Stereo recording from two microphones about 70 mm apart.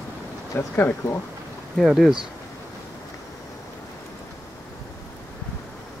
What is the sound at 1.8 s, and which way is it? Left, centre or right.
Speech, centre.